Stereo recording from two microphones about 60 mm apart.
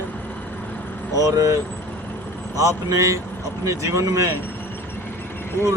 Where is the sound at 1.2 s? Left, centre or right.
Right.